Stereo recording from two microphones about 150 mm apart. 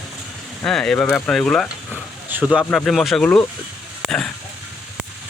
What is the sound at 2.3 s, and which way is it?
Speech, 10° right (ahead or behind).